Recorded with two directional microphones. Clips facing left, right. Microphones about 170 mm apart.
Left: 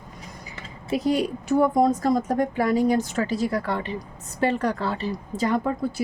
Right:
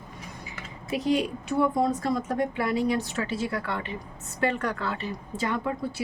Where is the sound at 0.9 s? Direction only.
40° left (ahead or behind).